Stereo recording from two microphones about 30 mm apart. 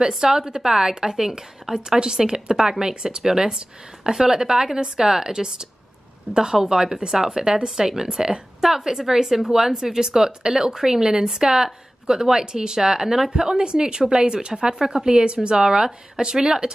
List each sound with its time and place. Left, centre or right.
0.2 s a woman's voice: right